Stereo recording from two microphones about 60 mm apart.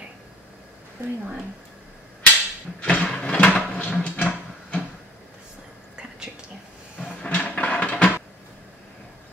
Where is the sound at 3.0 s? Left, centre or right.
Centre.